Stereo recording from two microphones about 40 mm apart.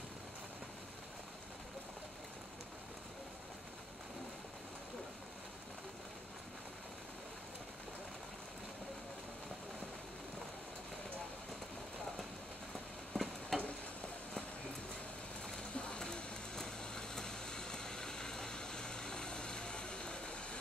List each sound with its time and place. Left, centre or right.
13.1 s stir: centre
15.7 s rain: left
16.0 s vehicle: centre